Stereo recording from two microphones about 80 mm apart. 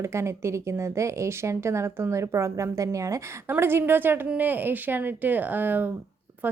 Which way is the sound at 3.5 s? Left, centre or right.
Right.